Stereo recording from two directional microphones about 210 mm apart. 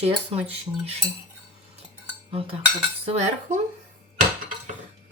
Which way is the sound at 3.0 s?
30° right (ahead or behind).